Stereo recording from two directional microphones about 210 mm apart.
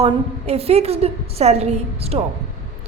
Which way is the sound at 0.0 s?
30° right (ahead or behind).